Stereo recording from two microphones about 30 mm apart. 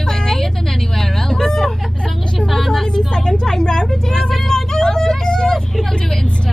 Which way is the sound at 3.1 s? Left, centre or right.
Centre.